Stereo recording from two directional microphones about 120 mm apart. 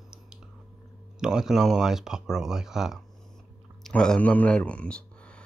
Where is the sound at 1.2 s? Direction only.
5° right (ahead or behind).